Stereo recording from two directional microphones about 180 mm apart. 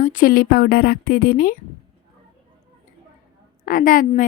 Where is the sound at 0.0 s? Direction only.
50° left (ahead or behind).